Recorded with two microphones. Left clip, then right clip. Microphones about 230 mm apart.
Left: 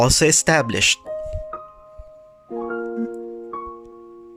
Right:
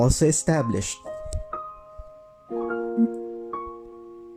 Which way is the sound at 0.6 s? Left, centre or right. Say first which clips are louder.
Left 12 dB; left.